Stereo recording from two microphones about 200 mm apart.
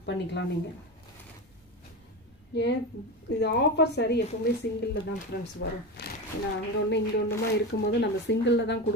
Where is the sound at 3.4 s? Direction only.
55° left (ahead or behind).